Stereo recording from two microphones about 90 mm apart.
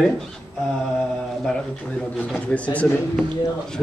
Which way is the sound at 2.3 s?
10° left (ahead or behind).